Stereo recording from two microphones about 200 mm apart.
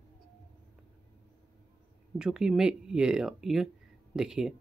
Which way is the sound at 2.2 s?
Centre (ahead or behind).